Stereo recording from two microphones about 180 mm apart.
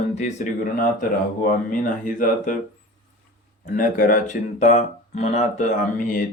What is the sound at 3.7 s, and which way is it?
Speech, 50° left (ahead or behind).